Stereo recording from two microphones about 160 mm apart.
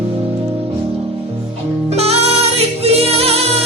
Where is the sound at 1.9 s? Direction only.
40° right (ahead or behind).